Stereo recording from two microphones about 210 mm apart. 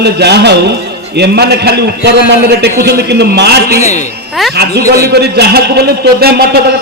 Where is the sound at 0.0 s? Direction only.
50° right (ahead or behind).